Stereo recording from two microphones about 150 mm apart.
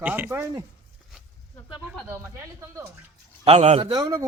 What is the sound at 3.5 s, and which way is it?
Speech, 45° right (ahead or behind).